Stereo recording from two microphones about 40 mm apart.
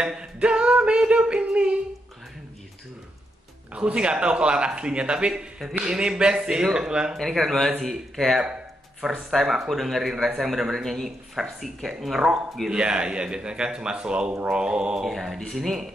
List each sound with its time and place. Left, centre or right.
0.0 s a sound: right
3.7 s a man's voice: right
7.2 s speech: centre
8.4 s a sound: right
9.3 s speech: centre
12.6 s a man's voice: right
15.0 s speech: centre